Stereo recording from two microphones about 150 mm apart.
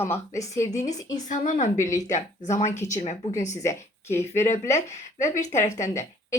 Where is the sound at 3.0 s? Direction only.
50° left (ahead or behind).